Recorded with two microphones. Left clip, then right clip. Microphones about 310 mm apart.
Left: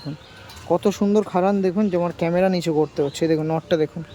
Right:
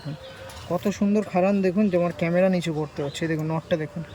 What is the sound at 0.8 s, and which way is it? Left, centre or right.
Speech, centre.